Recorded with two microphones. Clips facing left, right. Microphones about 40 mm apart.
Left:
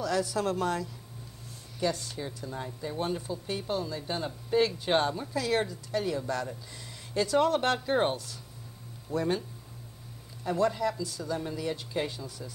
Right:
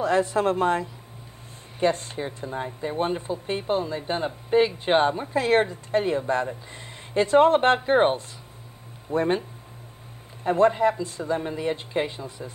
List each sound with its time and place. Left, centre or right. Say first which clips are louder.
0.0 s speech: right 7 dB; right
10.4 s speech: right 8 dB; right